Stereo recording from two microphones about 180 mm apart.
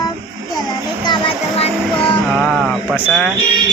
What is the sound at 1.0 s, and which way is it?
Speech, 30° left (ahead or behind).